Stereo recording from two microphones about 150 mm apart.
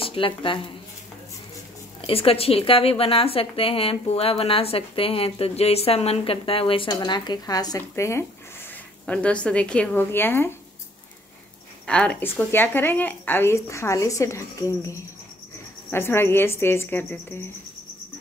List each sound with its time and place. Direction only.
0.0 s speech: 35° left (ahead or behind)
2.0 s a woman's voice: 40° left (ahead or behind); by 8.3 s 20° left (ahead or behind)
9.0 s speech: 10° left (ahead or behind)
11.8 s speech: 5° left (ahead or behind)
15.9 s speech: 15° left (ahead or behind)